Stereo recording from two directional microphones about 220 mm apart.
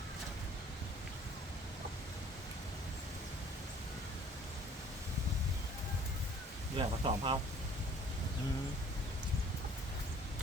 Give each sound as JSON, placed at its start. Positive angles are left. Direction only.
{"t": 6.7, "sound": "speech", "side_deg": -20}